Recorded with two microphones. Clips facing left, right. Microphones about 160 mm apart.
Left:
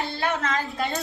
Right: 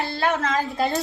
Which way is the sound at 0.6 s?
35° right (ahead or behind).